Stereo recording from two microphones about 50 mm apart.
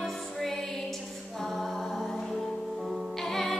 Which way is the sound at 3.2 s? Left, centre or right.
Centre.